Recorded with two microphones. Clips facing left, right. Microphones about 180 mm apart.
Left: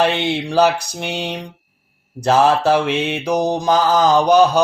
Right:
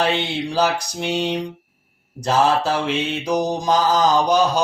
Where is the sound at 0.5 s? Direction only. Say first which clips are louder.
Left 5 dB; 60° left (ahead or behind).